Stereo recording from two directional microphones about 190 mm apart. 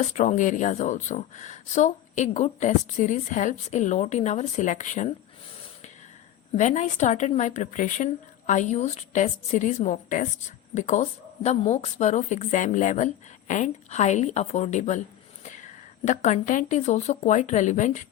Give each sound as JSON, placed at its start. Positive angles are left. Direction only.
{"t": 0.0, "sound": "a woman's voice", "side_deg": 40}
{"t": 6.6, "sound": "a woman's voice", "side_deg": 40}
{"t": 16.0, "sound": "a woman's voice", "side_deg": 40}